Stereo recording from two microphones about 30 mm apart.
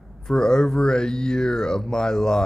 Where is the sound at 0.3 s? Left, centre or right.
Left.